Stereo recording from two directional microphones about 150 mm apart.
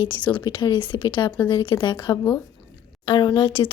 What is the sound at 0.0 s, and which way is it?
Speech, 35° left (ahead or behind).